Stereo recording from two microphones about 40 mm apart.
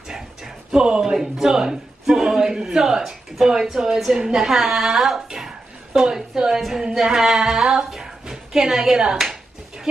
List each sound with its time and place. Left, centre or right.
0.7 s a man's voice: centre
5.9 s a man's voice: centre